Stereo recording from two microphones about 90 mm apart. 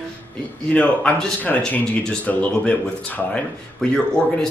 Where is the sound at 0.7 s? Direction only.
15° left (ahead or behind).